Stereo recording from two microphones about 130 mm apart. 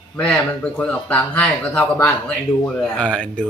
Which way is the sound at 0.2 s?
10° left (ahead or behind).